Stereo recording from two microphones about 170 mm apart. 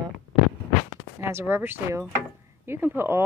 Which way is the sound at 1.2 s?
15° right (ahead or behind).